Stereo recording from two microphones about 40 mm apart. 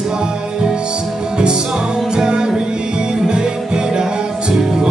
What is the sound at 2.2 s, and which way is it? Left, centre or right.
Music, centre.